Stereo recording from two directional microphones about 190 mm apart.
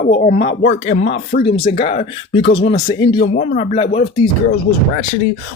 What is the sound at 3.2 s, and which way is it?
Speech, 50° left (ahead or behind).